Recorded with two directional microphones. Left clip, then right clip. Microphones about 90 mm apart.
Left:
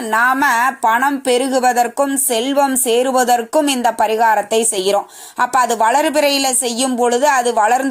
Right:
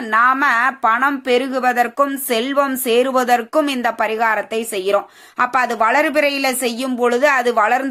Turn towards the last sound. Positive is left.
turn(degrees=35)  # may be behind; listen again after turning